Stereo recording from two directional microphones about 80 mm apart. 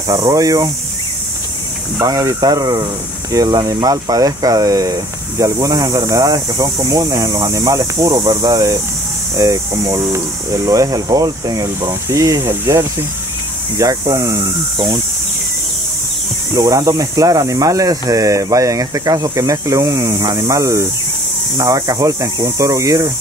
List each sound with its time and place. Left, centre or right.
0.3 s speech: right
2.0 s speech: right
8.4 s speech: right
16.5 s speech: right